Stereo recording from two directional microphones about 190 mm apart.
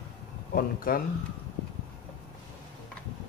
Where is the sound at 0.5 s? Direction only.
50° left (ahead or behind).